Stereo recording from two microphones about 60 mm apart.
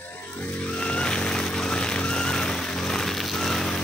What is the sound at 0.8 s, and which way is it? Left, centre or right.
Music, centre.